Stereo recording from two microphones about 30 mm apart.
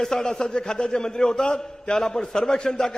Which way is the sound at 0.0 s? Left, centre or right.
Centre.